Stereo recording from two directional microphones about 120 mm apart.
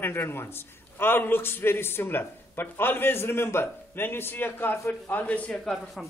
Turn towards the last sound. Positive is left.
turn(degrees=0)  # may be behind; listen again after turning